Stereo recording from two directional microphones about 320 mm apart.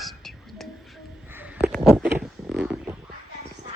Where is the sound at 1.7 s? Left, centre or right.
Centre.